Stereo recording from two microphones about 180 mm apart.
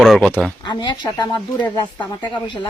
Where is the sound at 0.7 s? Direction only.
25° left (ahead or behind).